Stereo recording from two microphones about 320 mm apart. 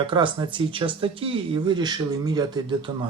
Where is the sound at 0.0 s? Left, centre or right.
Centre.